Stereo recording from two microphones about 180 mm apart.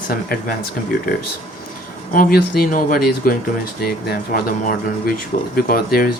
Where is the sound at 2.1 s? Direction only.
55° left (ahead or behind).